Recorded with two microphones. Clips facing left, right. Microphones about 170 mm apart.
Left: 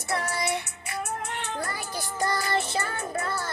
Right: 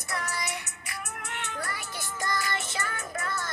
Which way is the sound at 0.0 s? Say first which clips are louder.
Left 6 dB; 30° left (ahead or behind).